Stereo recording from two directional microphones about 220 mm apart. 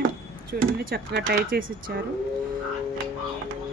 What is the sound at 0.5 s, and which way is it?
Speech, 40° right (ahead or behind).